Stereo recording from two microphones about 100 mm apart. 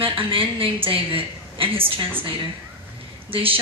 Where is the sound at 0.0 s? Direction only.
60° right (ahead or behind).